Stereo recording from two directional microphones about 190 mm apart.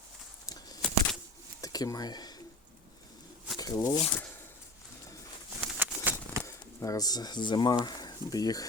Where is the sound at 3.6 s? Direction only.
15° left (ahead or behind).